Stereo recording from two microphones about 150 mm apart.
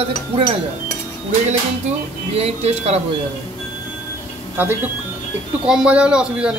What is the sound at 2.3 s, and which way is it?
Speech, 40° right (ahead or behind).